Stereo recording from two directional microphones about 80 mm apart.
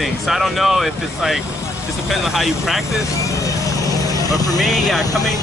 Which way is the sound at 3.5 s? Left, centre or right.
Left.